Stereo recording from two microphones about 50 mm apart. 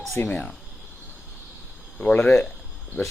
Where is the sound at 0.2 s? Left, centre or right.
Left.